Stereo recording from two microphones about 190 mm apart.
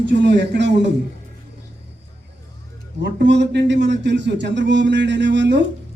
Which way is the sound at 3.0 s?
65° right (ahead or behind).